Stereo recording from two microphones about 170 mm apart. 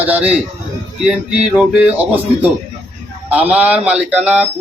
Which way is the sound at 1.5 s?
5° right (ahead or behind).